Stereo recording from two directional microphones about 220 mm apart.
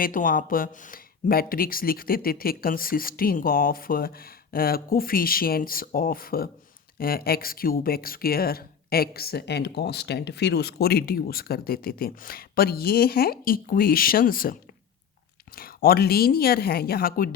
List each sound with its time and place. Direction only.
0.0 s speech: 40° left (ahead or behind)